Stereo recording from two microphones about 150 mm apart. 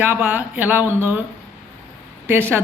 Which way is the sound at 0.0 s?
10° right (ahead or behind).